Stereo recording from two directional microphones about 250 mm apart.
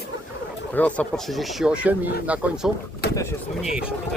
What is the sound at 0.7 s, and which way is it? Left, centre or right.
Speech, centre.